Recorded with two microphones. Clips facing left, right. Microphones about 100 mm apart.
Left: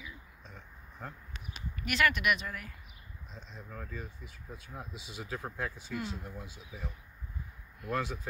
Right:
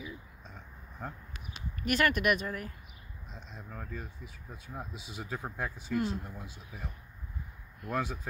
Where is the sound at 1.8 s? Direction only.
40° right (ahead or behind).